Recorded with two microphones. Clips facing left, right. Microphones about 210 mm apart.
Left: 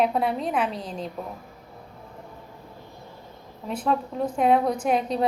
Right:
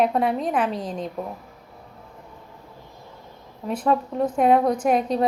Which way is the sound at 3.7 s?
5° right (ahead or behind).